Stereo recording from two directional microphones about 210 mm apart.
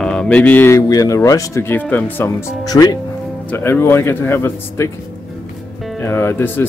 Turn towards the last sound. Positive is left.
turn(degrees=10)  # may be behind; listen again after turning